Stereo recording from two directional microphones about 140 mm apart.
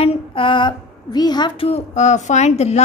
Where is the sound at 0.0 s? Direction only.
40° left (ahead or behind).